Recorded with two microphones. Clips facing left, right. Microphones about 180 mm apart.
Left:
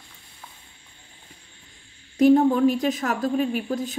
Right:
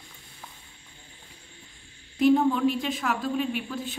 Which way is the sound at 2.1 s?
45° left (ahead or behind).